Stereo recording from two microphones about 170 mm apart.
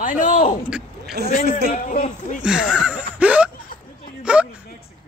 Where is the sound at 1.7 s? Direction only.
45° left (ahead or behind).